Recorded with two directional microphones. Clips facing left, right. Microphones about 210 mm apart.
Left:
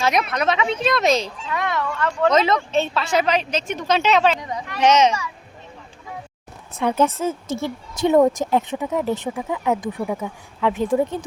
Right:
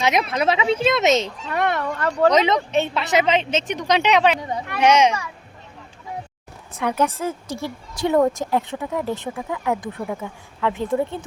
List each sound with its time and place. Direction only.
0.0 s speech: 25° right (ahead or behind)
1.8 s speech: 40° right (ahead or behind)
2.3 s a woman's voice: 15° right (ahead or behind)
4.4 s a sound: 30° right (ahead or behind)
4.8 s a woman's voice: 10° right (ahead or behind)
6.7 s speech: 25° left (ahead or behind)